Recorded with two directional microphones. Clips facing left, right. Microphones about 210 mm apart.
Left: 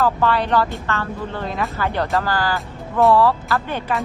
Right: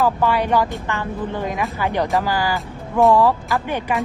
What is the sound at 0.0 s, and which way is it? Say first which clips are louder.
A woman's voice: even; 10° right (ahead or behind).